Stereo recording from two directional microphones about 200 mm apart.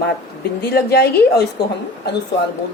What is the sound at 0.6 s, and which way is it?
Speech, 50° left (ahead or behind).